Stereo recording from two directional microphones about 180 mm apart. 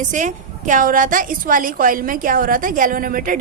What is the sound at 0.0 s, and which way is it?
A woman's voice, 45° right (ahead or behind).